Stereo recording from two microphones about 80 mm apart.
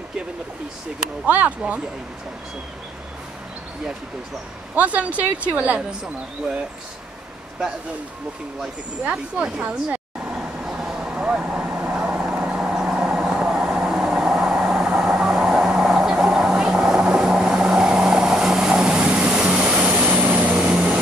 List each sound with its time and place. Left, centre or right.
1.2 s speech: centre
4.7 s speech: centre
9.0 s speech: centre
10.3 s vehicle: centre